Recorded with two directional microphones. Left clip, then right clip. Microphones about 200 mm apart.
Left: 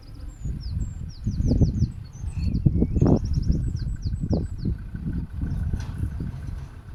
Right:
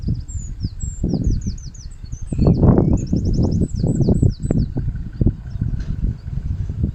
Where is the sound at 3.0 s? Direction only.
25° right (ahead or behind).